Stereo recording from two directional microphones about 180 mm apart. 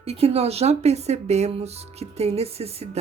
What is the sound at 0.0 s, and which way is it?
Speech, 35° right (ahead or behind).